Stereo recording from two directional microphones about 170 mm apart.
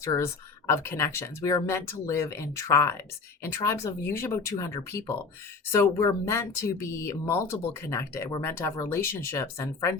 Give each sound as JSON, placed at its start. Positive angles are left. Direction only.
{"t": 0.0, "sound": "speech", "side_deg": 20}